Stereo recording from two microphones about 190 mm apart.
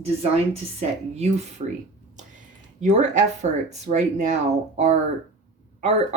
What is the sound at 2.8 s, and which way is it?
Speech, 40° right (ahead or behind).